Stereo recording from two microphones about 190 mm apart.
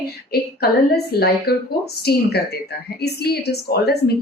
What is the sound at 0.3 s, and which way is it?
A woman's voice, 55° left (ahead or behind).